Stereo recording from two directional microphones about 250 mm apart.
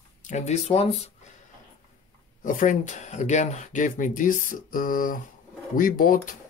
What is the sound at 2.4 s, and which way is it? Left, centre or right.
Speech, left.